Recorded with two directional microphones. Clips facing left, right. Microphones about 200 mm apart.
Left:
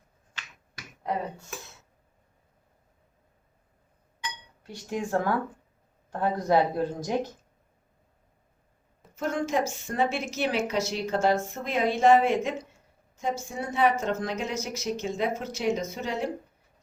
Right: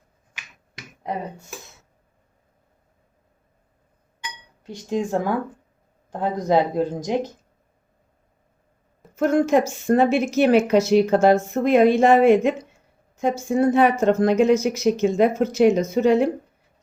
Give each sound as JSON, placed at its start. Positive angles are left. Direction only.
{"t": 0.3, "sound": "finger snapping", "side_deg": -15}
{"t": 4.9, "sound": "speech", "side_deg": -20}
{"t": 9.1, "sound": "speech", "side_deg": -60}